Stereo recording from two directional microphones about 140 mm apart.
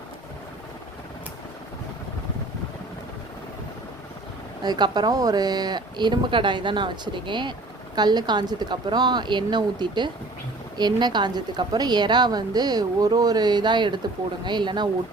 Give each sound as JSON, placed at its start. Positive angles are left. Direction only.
{"t": 4.6, "sound": "a woman's voice", "side_deg": -30}